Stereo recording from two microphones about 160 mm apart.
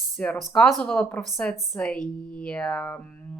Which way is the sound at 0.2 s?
Centre (ahead or behind).